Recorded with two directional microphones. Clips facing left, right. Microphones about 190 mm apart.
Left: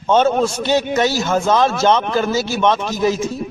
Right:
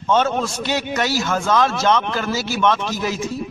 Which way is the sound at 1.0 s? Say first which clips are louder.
Left 4 dB; 25° left (ahead or behind).